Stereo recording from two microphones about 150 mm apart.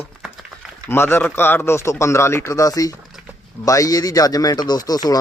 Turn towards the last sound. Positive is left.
turn(degrees=25)  # may be behind; listen again after turning